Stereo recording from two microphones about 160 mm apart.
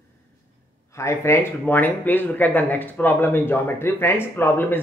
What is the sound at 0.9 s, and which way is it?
A woman's voice, 20° left (ahead or behind).